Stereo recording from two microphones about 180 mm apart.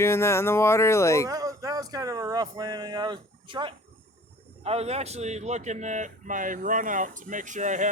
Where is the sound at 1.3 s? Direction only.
20° right (ahead or behind).